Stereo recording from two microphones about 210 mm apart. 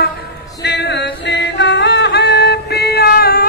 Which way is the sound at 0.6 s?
55° left (ahead or behind).